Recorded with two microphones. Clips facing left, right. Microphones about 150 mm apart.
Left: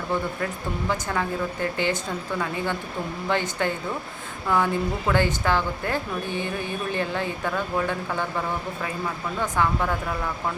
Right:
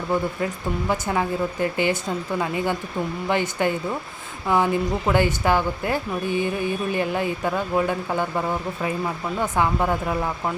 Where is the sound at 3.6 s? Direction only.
15° right (ahead or behind).